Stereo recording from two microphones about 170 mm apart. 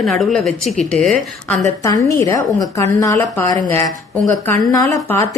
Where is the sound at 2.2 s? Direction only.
20° left (ahead or behind).